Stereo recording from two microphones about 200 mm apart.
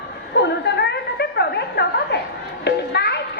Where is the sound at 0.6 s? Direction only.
55° left (ahead or behind).